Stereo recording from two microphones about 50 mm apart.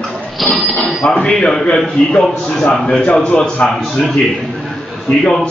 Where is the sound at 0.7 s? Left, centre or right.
Centre.